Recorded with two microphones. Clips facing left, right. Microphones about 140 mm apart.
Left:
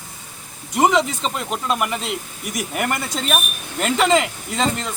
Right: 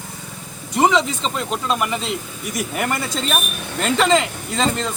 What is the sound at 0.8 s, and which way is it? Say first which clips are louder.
Speech: even; 10° left (ahead or behind).